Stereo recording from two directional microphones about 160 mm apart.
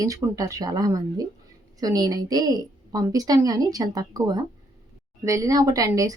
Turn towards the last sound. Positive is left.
turn(degrees=-20)  # may be behind; listen again after turning